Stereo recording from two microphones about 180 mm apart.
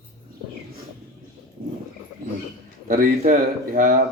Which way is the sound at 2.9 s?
55° right (ahead or behind).